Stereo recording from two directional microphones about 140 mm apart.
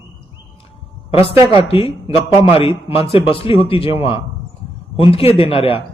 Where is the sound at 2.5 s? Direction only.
40° left (ahead or behind).